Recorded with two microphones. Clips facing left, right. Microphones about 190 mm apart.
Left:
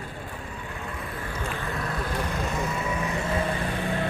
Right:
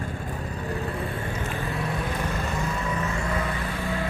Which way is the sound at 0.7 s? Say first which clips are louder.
Right 8 dB; 30° right (ahead or behind).